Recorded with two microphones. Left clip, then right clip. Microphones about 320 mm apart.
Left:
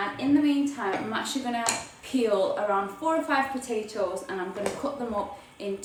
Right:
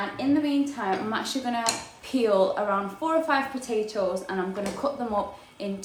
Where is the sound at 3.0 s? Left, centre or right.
Centre.